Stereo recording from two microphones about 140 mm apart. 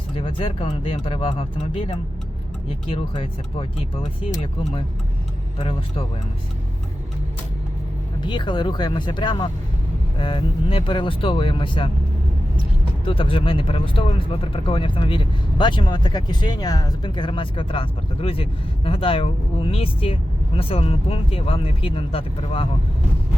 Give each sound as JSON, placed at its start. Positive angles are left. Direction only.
{"t": 0.2, "sound": "speech", "side_deg": 40}
{"t": 8.2, "sound": "speech", "side_deg": 35}
{"t": 13.1, "sound": "speech", "side_deg": 40}